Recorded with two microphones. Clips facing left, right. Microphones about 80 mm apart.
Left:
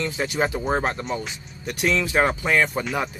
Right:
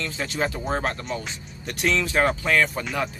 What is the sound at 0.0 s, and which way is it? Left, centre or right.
Speech, centre.